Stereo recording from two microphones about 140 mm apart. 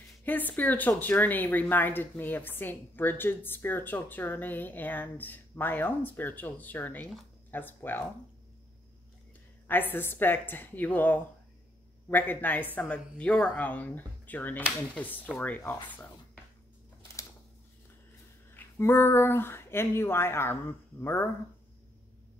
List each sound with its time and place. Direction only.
0.2 s speech: 10° left (ahead or behind)
9.7 s speech: 15° left (ahead or behind)
18.5 s a sound: 15° left (ahead or behind)